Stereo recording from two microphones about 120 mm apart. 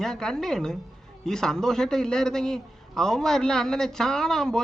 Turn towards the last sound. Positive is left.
turn(degrees=5)  # may be behind; listen again after turning